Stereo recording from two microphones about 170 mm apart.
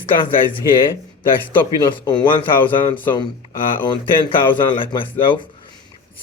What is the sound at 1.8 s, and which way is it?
Speech, 25° left (ahead or behind).